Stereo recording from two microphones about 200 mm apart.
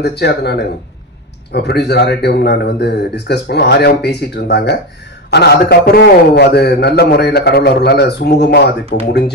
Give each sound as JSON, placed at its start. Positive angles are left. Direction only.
{"t": 0.0, "sound": "a man's voice", "side_deg": 55}